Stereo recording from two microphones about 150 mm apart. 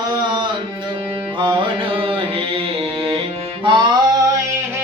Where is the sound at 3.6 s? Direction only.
30° right (ahead or behind).